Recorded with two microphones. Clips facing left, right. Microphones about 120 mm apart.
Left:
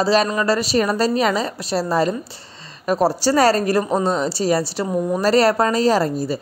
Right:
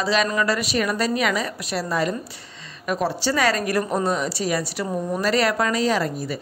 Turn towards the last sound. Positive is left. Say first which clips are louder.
# left 5 dB
turn(degrees=30)  # may be behind; listen again after turning